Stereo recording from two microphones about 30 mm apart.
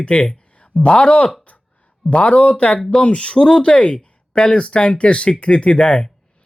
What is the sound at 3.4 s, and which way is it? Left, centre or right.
Speech, left.